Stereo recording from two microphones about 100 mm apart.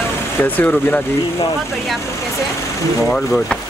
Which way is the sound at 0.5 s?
15° left (ahead or behind).